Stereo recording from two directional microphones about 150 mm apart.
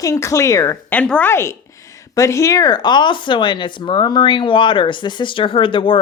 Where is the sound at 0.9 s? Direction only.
10° left (ahead or behind).